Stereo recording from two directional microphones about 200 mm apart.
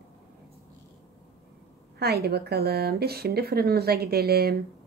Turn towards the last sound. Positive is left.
turn(degrees=-50)  # may be behind; listen again after turning